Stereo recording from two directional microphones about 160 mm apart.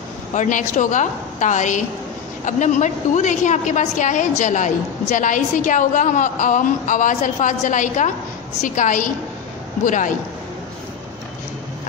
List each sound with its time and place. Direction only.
0.3 s a woman's voice: 50° left (ahead or behind)